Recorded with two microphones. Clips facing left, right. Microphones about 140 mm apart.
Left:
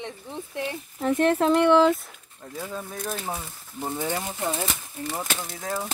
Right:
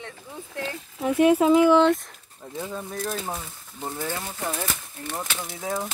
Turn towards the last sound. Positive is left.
turn(degrees=0)  # may be behind; listen again after turning